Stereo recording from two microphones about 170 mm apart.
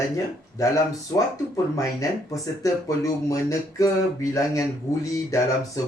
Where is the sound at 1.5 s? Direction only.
20° left (ahead or behind).